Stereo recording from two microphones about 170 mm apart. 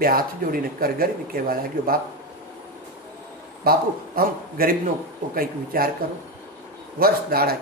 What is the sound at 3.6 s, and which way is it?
Speech, 60° right (ahead or behind).